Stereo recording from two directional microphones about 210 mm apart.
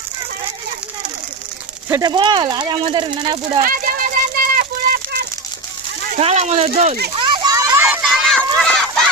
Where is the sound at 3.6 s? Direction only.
40° right (ahead or behind).